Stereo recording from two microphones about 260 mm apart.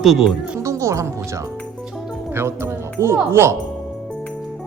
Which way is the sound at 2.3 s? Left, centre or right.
Centre.